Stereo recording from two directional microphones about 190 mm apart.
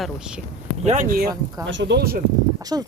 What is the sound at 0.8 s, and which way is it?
Speech, 45° right (ahead or behind).